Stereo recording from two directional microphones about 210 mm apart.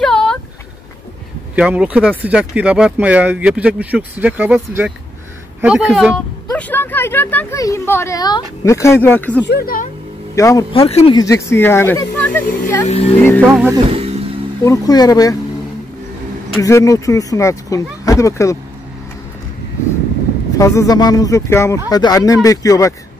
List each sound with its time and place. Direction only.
0.0 s a sound: 5° left (ahead or behind)
1.5 s speech: 5° right (ahead or behind)
6.5 s speech: 10° left (ahead or behind)
9.5 s speech: 45° left (ahead or behind)
10.3 s speech: 15° left (ahead or behind)
11.1 s speech: 15° left (ahead or behind)
12.8 s speech: 30° left (ahead or behind)
13.2 s speech: 10° left (ahead or behind)
13.5 s speech: 10° right (ahead or behind)
13.8 s music: 30° right (ahead or behind)
14.6 s speech: 15° left (ahead or behind)
16.6 s speech: 15° left (ahead or behind)
20.5 s speech: 15° left (ahead or behind)